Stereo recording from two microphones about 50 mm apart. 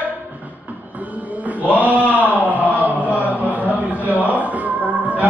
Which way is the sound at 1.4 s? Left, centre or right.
Right.